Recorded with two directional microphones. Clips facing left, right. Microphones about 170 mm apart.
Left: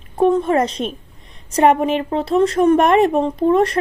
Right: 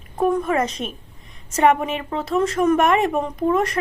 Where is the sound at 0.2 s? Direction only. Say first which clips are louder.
Left 4 dB; 25° left (ahead or behind).